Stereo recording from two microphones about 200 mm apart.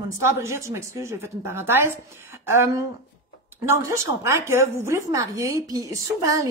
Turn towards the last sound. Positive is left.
turn(degrees=-15)  # may be behind; listen again after turning